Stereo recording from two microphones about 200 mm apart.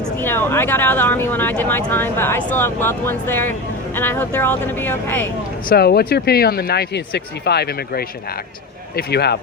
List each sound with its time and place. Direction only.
0.0 s speech: 10° left (ahead or behind)
5.6 s speech: 50° left (ahead or behind)